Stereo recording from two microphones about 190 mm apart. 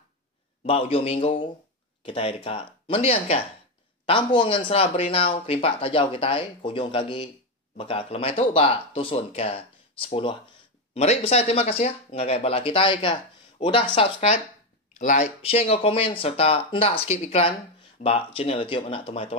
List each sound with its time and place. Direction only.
0.7 s speech: 30° left (ahead or behind)